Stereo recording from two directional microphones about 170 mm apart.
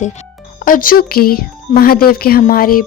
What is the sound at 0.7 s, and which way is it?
Speech, 55° left (ahead or behind).